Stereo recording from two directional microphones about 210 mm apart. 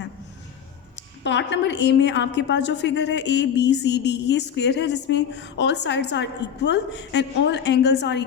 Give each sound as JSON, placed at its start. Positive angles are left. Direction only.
{"t": 0.9, "sound": "a woman's voice", "side_deg": 55}